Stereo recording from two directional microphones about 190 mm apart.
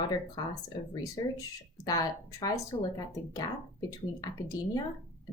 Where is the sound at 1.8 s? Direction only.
20° left (ahead or behind).